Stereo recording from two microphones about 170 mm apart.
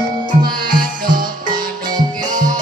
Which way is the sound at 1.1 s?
25° right (ahead or behind).